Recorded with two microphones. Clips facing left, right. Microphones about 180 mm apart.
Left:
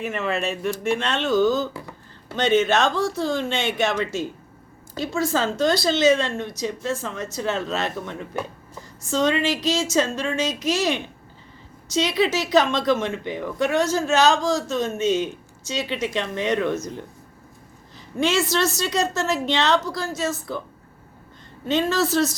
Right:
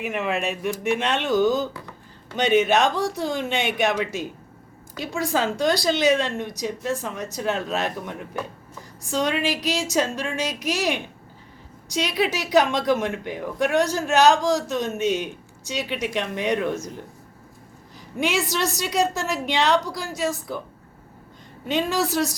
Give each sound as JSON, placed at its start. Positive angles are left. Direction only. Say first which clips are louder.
{"t": 0.0, "sound": "a woman's voice", "louder": "even", "side_deg": -15}
{"t": 18.2, "sound": "a woman's voice", "louder": "left 3 dB", "side_deg": -15}
{"t": 21.7, "sound": "a woman's voice", "louder": "left 2 dB", "side_deg": -15}